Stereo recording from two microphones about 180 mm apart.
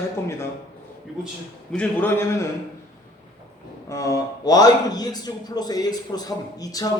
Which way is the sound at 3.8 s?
15° left (ahead or behind).